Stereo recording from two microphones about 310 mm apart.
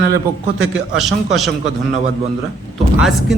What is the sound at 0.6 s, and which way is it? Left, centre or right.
Speech, centre.